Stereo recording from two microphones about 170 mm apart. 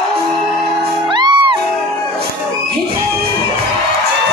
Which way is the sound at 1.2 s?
25° right (ahead or behind).